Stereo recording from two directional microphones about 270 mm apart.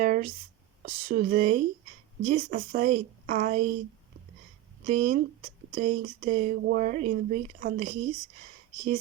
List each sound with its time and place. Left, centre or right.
0.0 s a sound: right
0.8 s a woman's voice: right
4.9 s speech: right